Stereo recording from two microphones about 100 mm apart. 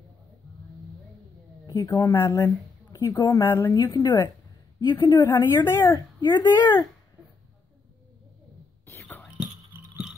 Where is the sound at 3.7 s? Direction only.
40° left (ahead or behind).